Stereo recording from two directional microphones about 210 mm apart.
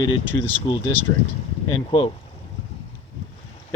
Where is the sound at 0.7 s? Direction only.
25° left (ahead or behind).